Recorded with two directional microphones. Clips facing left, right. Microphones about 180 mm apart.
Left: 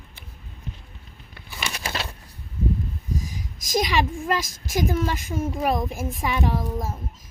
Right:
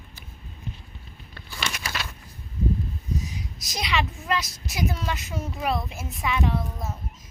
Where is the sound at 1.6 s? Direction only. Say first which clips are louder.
Left 3 dB; 30° left (ahead or behind).